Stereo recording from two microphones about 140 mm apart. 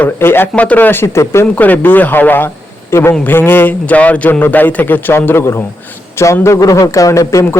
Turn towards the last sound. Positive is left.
turn(degrees=25)  # may be behind; listen again after turning